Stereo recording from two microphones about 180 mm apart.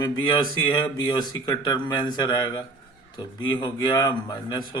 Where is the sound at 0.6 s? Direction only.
25° left (ahead or behind).